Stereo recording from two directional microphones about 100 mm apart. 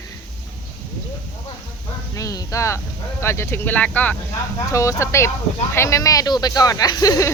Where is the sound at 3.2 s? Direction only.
25° left (ahead or behind).